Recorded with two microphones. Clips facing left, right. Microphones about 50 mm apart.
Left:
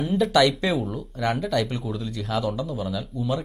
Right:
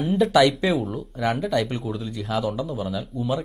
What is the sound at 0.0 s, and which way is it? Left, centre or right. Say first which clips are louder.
Speech: right 2 dB; centre.